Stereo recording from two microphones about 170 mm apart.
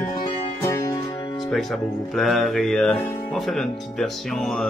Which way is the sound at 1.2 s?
25° left (ahead or behind).